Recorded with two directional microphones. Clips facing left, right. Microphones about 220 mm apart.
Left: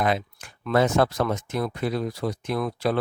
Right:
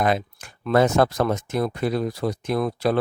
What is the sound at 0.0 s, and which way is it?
Speech, 45° right (ahead or behind).